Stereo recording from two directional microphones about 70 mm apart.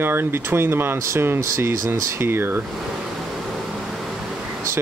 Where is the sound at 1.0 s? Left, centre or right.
Right.